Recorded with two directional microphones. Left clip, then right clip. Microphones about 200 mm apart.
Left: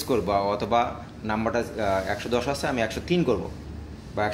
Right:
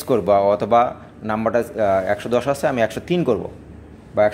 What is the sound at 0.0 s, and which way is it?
Speech, 50° right (ahead or behind).